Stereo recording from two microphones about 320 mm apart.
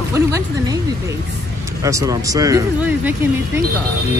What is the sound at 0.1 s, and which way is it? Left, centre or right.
Speech, centre.